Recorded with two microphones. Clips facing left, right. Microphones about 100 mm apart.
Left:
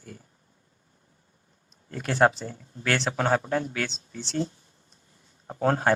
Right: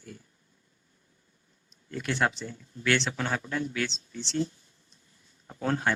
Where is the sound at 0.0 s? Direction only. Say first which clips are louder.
Left 1 dB; 40° left (ahead or behind).